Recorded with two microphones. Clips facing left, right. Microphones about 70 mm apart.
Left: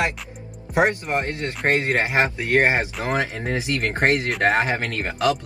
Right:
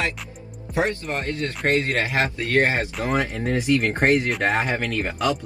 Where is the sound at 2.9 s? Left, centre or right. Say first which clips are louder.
Even; centre.